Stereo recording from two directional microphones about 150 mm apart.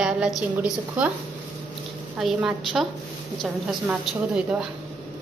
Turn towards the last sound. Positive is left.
turn(degrees=-5)  # may be behind; listen again after turning